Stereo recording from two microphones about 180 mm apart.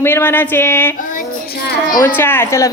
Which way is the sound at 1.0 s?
50° left (ahead or behind).